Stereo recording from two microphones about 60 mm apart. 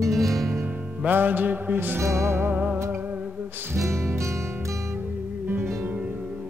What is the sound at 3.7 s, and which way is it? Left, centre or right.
Music, right.